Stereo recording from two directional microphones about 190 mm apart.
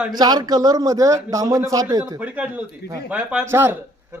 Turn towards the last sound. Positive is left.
turn(degrees=-10)  # may be behind; listen again after turning